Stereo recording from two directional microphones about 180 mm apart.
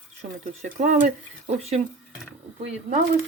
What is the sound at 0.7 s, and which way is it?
Speech, 50° right (ahead or behind).